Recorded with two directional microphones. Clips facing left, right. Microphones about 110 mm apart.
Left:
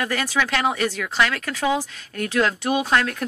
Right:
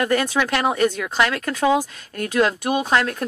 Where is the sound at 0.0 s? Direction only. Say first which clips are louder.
Right 4 dB; 25° right (ahead or behind).